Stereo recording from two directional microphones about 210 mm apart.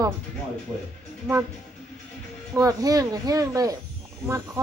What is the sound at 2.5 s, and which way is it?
Speech, 15° right (ahead or behind).